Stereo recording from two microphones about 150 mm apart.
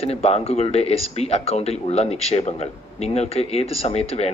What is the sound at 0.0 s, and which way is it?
Speech, 45° left (ahead or behind).